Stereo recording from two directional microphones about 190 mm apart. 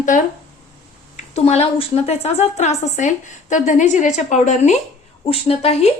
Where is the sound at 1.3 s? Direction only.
35° left (ahead or behind).